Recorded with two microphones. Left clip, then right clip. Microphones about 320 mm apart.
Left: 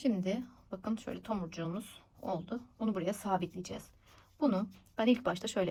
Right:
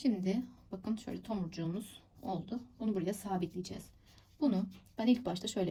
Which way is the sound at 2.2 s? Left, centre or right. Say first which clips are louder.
Left 2 dB; centre.